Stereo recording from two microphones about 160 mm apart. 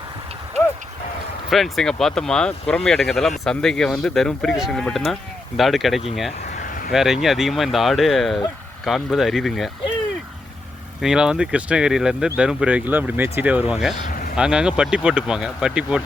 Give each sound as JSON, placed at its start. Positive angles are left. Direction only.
{"t": 1.5, "sound": "speech", "side_deg": 0}
{"t": 6.6, "sound": "a sound", "side_deg": 65}
{"t": 6.9, "sound": "speech", "side_deg": 0}
{"t": 11.0, "sound": "speech", "side_deg": -5}
{"t": 14.1, "sound": "a sound", "side_deg": 65}
{"t": 14.3, "sound": "speech", "side_deg": -5}